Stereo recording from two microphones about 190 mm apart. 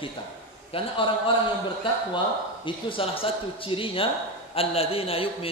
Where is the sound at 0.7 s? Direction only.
25° left (ahead or behind).